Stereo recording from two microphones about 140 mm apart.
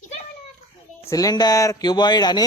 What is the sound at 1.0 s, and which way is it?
Speech, 25° left (ahead or behind).